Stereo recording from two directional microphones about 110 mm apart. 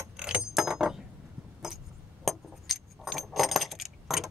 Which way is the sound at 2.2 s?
Centre (ahead or behind).